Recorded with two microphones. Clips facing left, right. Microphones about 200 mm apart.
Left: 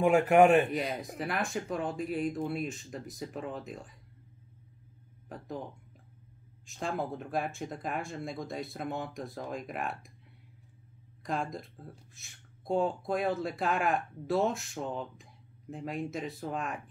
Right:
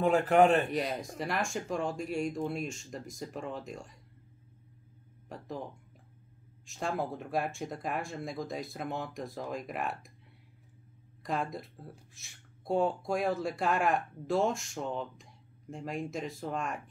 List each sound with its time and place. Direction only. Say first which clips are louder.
0.0 s a man's voice: left 2 dB; 15° left (ahead or behind)
0.7 s speech: right 1 dB; centre (ahead or behind)
5.3 s speech: even; centre (ahead or behind)
11.2 s speech: even; centre (ahead or behind)